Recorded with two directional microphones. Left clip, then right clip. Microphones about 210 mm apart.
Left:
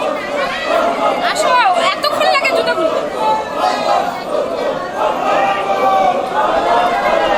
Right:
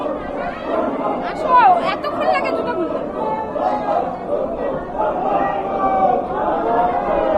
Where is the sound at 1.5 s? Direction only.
15° left (ahead or behind).